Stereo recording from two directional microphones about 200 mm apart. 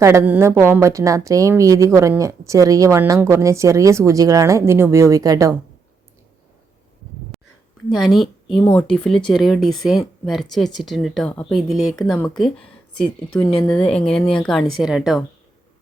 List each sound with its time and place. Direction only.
0.0 s speech: 15° right (ahead or behind)
7.9 s a woman's voice: centre (ahead or behind)